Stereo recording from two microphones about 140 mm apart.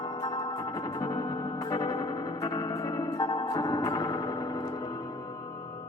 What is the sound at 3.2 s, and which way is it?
Music, 30° left (ahead or behind).